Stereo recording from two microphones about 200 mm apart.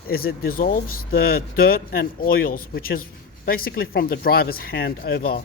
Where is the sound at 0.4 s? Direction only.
45° left (ahead or behind).